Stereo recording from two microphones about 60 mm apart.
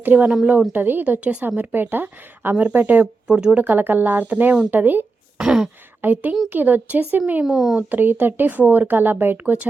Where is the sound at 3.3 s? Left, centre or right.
Centre.